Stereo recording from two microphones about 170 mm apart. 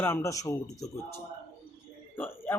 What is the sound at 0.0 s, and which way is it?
Speech, 15° left (ahead or behind).